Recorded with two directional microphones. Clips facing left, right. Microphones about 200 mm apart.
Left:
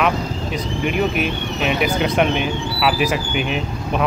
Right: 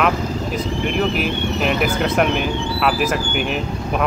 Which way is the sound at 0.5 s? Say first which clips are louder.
Left 1 dB; centre (ahead or behind).